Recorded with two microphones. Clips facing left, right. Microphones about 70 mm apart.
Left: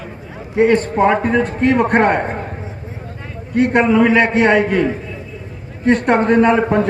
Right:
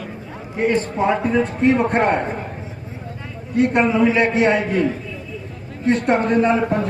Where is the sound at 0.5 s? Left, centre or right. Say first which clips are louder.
Left 6 dB; left.